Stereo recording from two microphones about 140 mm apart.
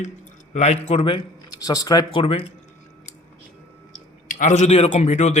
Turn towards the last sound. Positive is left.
turn(degrees=50)  # may be behind; listen again after turning